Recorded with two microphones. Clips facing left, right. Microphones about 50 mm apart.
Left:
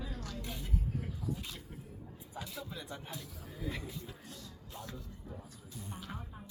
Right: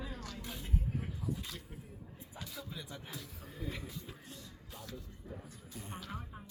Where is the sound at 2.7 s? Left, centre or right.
Left.